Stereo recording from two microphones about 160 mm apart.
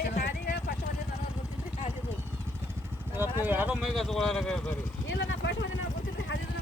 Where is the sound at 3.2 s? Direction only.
10° right (ahead or behind); by 4.7 s 5° left (ahead or behind).